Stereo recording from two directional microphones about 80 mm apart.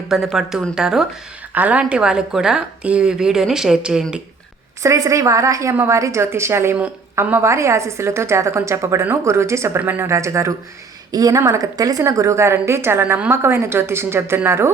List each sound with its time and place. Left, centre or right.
0.1 s a woman's voice: centre
1.5 s a woman's voice: centre
4.8 s a woman's voice: right
11.1 s a woman's voice: right